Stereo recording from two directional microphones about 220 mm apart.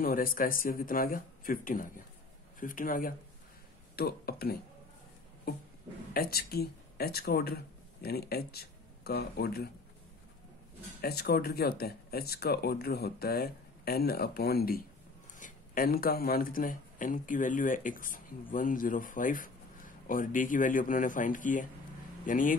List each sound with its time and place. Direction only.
0.0 s speech: 40° left (ahead or behind)
6.1 s speech: 45° left (ahead or behind)
11.0 s speech: 45° left (ahead or behind)